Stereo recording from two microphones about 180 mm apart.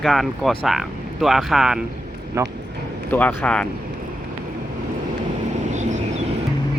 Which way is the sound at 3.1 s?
10° left (ahead or behind).